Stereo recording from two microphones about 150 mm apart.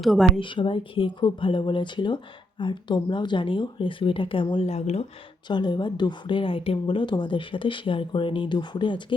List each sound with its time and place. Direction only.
0.0 s a woman's voice: centre (ahead or behind)
0.3 s speech: 35° left (ahead or behind)
5.5 s speech: 30° left (ahead or behind)